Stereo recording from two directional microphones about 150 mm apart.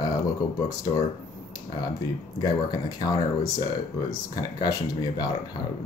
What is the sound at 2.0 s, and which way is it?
Speech, 25° left (ahead or behind).